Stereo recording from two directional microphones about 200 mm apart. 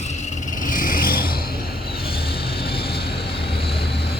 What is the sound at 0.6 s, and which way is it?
Vehicle, 45° left (ahead or behind).